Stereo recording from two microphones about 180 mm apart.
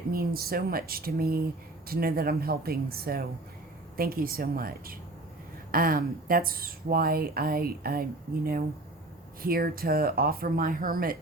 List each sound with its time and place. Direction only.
0.1 s speech: 55° right (ahead or behind)
9.4 s speech: 55° right (ahead or behind)